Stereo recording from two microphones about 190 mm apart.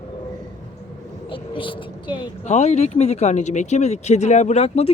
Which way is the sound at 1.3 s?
25° left (ahead or behind).